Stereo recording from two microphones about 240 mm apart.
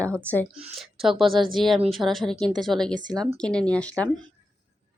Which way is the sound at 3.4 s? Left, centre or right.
Centre.